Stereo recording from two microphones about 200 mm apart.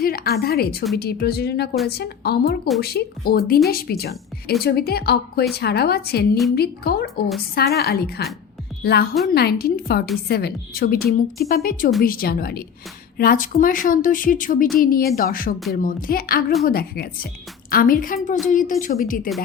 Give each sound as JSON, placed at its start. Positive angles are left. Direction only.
{"t": 0.0, "sound": "a woman's voice", "side_deg": 50}